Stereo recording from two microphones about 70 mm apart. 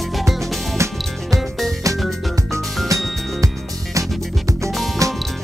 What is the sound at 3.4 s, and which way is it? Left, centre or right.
Music, right.